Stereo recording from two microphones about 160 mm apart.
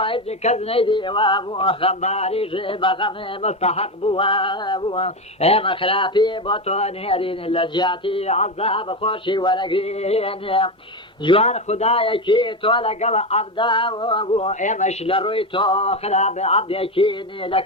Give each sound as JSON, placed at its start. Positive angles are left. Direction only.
{"t": 0.0, "sound": "a man's voice", "side_deg": 35}
{"t": 6.7, "sound": "a man's voice", "side_deg": 40}
{"t": 14.6, "sound": "a man's voice", "side_deg": 50}